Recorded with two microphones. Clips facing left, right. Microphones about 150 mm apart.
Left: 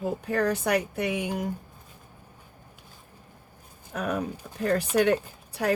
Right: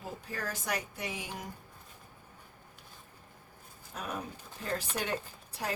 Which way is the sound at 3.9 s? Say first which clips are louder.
Left 10 dB; 65° left (ahead or behind).